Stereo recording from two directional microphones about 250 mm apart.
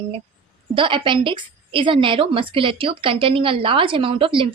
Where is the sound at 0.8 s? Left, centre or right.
Centre.